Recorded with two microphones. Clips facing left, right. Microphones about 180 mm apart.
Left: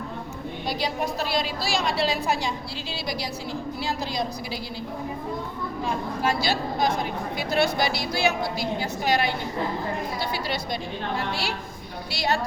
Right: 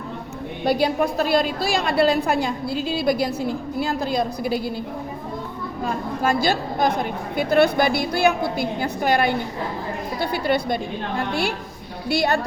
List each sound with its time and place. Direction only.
0.6 s a woman's voice: 55° right (ahead or behind)
5.8 s a woman's voice: 50° right (ahead or behind)